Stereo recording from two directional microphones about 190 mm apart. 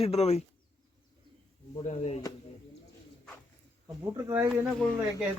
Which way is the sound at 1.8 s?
35° left (ahead or behind).